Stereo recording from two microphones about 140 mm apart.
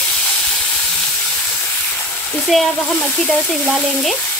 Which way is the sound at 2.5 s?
Centre (ahead or behind).